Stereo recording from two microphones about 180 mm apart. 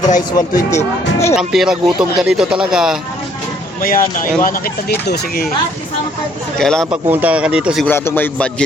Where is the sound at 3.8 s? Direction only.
50° left (ahead or behind).